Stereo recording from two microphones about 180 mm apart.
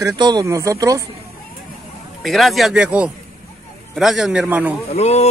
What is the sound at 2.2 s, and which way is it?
A woman's voice, centre (ahead or behind).